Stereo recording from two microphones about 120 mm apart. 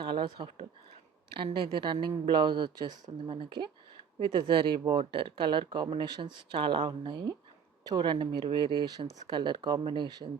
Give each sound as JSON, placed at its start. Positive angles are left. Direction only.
{"t": 0.0, "sound": "speech", "side_deg": -40}